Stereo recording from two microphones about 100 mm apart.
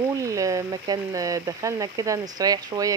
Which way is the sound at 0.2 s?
30° right (ahead or behind).